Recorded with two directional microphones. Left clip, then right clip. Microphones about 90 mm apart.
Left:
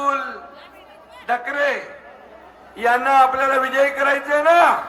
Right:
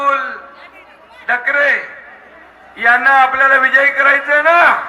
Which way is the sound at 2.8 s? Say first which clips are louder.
Right 5 dB; 15° left (ahead or behind).